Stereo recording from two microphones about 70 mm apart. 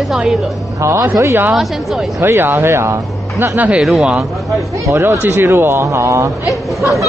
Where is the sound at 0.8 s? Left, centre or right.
Right.